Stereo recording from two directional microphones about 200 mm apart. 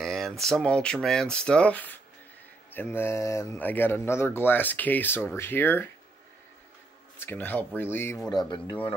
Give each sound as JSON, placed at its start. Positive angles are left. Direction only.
{"t": 0.0, "sound": "speech", "side_deg": 0}
{"t": 7.2, "sound": "speech", "side_deg": 10}